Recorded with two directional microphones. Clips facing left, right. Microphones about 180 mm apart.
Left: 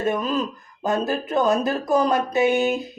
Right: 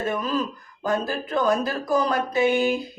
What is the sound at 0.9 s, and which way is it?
Speech, 20° left (ahead or behind).